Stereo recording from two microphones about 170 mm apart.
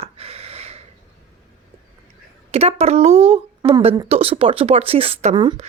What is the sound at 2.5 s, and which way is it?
A woman's voice, 40° right (ahead or behind).